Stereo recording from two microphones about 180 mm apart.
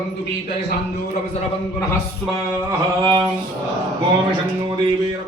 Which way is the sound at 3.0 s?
25° right (ahead or behind).